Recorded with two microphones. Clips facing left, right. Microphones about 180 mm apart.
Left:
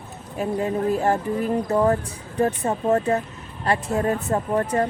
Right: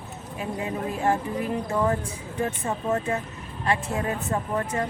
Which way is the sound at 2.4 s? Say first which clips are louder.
Left 6 dB; 35° left (ahead or behind).